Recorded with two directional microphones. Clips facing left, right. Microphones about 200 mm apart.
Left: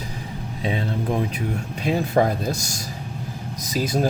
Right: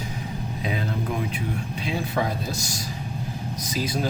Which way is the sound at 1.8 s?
45° left (ahead or behind).